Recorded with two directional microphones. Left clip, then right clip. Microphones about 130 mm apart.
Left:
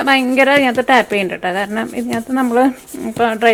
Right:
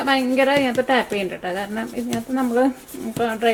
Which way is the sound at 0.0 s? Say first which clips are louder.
Left 6 dB; 30° left (ahead or behind).